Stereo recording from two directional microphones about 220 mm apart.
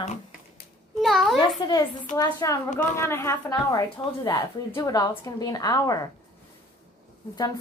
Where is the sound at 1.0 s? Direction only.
Centre (ahead or behind).